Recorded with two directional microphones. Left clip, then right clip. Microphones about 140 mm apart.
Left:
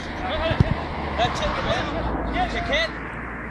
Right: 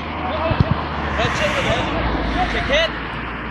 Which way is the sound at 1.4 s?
15° left (ahead or behind).